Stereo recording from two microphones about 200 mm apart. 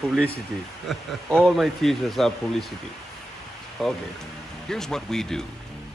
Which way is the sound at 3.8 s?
Centre (ahead or behind).